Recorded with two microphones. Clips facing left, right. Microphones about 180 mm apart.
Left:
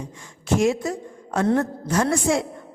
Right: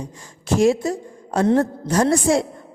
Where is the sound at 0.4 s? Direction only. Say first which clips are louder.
Right 3 dB; 35° right (ahead or behind).